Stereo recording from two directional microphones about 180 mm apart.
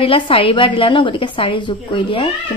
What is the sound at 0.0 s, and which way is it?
A woman's voice, 30° left (ahead or behind).